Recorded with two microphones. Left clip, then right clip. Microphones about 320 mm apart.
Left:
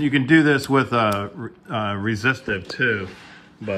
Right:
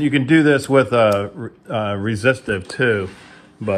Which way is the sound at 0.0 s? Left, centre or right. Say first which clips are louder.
Right 2 dB; centre.